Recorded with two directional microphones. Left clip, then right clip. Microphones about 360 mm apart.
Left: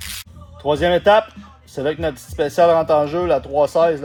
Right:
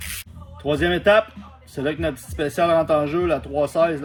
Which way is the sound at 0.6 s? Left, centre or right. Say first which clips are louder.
Left 5 dB; centre.